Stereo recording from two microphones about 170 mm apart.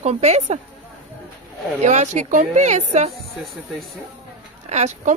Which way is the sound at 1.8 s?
45° right (ahead or behind).